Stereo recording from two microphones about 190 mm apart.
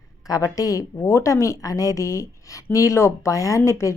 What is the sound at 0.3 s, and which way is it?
A woman's voice, 20° left (ahead or behind).